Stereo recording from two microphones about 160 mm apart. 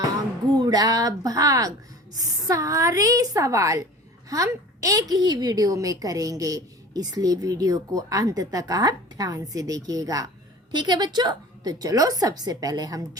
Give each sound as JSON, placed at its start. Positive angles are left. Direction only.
{"t": 0.5, "sound": "a woman's voice", "side_deg": -25}